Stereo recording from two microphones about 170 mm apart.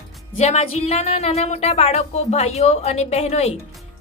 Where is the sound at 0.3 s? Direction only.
40° left (ahead or behind).